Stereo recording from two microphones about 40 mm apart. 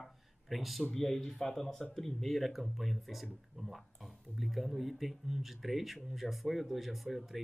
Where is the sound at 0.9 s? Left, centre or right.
Centre.